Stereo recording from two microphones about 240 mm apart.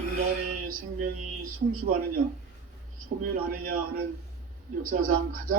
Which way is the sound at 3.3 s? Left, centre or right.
Right.